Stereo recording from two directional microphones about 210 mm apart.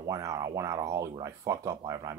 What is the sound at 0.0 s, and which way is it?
Speech, 15° right (ahead or behind).